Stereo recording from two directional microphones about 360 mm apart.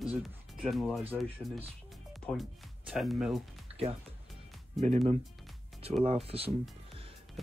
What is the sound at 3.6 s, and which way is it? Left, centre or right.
Music, centre.